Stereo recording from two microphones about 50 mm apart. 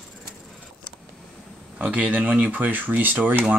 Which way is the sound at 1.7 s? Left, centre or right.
Right.